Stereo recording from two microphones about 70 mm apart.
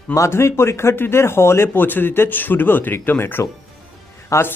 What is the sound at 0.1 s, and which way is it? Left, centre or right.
Speech, left.